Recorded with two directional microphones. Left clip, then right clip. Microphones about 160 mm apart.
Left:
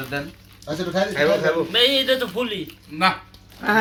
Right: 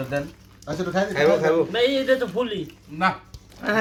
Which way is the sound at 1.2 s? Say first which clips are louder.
Right 2 dB; 40° right (ahead or behind).